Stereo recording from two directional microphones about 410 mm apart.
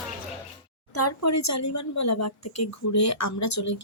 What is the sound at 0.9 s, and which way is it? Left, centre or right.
Speech, left.